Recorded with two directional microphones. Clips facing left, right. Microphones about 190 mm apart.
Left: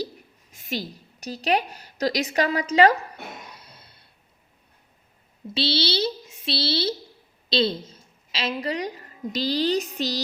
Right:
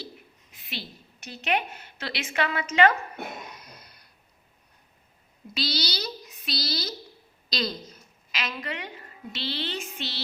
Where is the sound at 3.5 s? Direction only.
30° left (ahead or behind).